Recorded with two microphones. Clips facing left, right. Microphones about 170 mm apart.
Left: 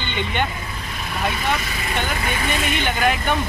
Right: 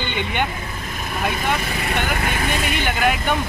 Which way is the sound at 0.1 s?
10° right (ahead or behind).